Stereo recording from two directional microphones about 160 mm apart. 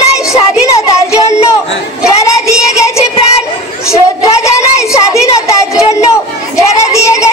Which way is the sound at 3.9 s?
20° left (ahead or behind).